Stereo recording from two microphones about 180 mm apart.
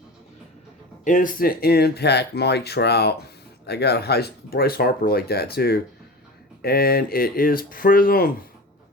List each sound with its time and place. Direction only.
1.0 s speech: 45° left (ahead or behind)